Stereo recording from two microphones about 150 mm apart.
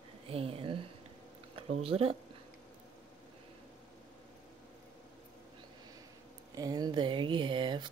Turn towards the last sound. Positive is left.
turn(degrees=-30)  # may be behind; listen again after turning